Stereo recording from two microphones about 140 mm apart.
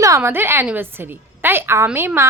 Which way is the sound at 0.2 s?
15° right (ahead or behind).